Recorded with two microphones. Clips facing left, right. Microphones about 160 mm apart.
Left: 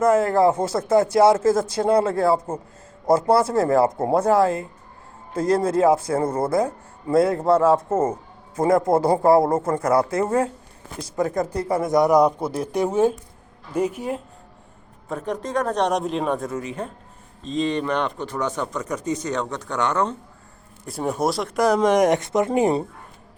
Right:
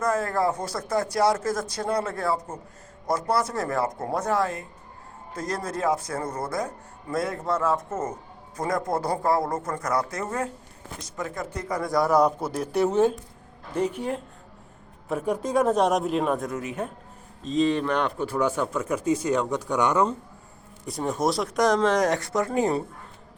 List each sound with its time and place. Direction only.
0.0 s speech: 25° left (ahead or behind)
11.8 s speech: 20° left (ahead or behind)
15.1 s speech: 5° right (ahead or behind)
20.8 s speech: 5° left (ahead or behind); by 22.8 s 20° left (ahead or behind)